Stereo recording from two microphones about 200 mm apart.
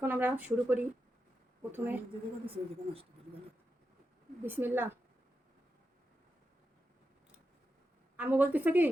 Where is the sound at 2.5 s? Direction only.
30° right (ahead or behind).